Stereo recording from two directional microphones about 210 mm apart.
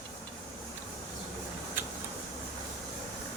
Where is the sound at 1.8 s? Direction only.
10° right (ahead or behind).